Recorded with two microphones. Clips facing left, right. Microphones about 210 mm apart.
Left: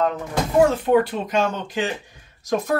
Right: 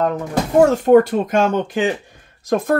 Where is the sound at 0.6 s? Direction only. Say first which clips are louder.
Right 5 dB; 45° right (ahead or behind).